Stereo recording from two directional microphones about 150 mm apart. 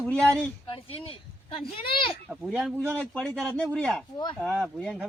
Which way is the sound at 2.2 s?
5° right (ahead or behind).